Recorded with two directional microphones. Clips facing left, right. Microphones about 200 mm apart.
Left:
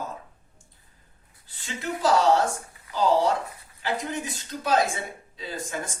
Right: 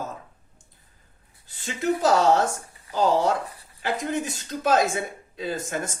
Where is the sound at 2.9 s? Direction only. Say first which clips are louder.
Right 1 dB; 45° right (ahead or behind).